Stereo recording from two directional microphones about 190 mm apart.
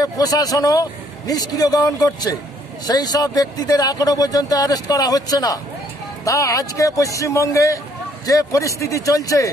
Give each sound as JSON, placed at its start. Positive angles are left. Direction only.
{"t": 0.0, "sound": "speech", "side_deg": 20}